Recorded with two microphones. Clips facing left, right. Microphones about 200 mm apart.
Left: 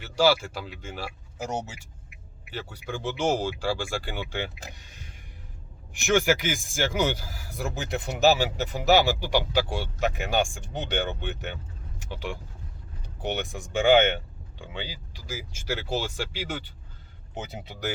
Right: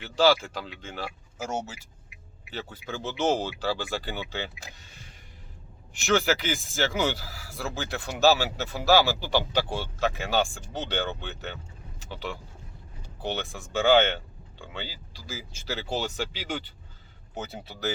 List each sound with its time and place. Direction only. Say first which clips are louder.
0.0 s speech: even; 10° left (ahead or behind)
6.1 s speech: left 1 dB; 15° left (ahead or behind)